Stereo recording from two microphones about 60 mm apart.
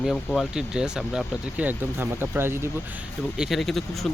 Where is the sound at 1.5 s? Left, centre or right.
Right.